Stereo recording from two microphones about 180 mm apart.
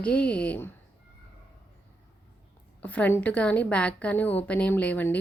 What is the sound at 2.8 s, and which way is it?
A woman's voice, 10° left (ahead or behind).